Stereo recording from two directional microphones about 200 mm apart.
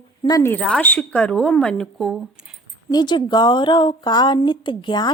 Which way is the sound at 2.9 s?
20° left (ahead or behind).